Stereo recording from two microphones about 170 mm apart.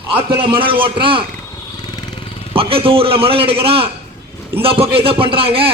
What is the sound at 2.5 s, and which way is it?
A man's voice, 35° right (ahead or behind).